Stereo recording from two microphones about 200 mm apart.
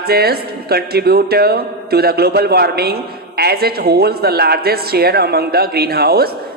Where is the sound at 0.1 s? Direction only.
50° right (ahead or behind).